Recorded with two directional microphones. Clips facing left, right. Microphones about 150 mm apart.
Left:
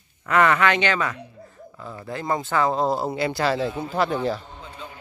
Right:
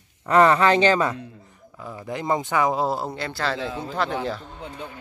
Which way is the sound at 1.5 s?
15° right (ahead or behind).